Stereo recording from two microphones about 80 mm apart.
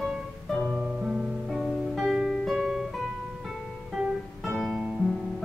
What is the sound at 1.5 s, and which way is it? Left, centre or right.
Music, centre.